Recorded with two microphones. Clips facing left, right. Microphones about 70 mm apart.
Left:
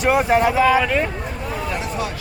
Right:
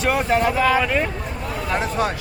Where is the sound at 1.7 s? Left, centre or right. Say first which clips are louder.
Right 6 dB; right.